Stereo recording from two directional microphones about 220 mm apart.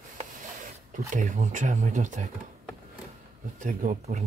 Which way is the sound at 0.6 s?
35° right (ahead or behind).